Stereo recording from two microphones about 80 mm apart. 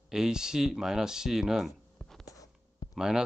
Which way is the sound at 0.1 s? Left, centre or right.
Centre.